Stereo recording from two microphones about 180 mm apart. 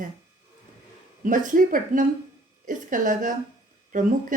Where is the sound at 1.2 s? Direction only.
50° right (ahead or behind).